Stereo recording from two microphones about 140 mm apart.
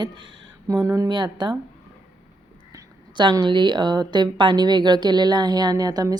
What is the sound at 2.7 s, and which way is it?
A woman's voice, 30° right (ahead or behind).